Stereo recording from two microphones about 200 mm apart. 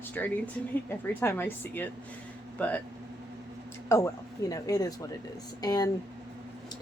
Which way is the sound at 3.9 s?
15° left (ahead or behind).